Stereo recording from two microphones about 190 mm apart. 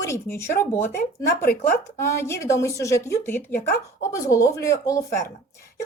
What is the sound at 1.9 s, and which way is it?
A woman's voice, 15° left (ahead or behind).